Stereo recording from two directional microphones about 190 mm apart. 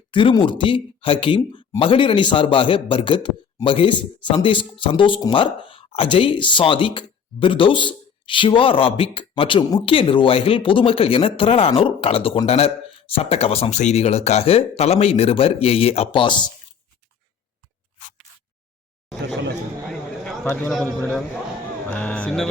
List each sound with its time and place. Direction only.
0.1 s speech: 25° left (ahead or behind)
20.2 s a man's voice: 5° left (ahead or behind)